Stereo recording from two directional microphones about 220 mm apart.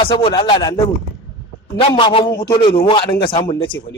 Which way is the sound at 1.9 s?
20° left (ahead or behind).